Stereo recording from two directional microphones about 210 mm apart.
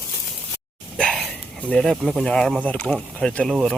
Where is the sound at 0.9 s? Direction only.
5° left (ahead or behind).